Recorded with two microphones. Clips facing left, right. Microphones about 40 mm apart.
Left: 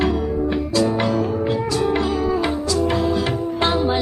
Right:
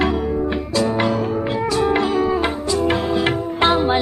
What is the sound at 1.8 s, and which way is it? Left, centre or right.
Music, right.